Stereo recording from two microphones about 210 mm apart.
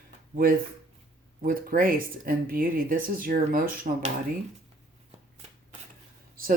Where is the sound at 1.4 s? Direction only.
40° right (ahead or behind).